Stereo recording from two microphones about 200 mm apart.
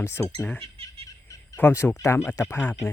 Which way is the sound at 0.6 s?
30° right (ahead or behind).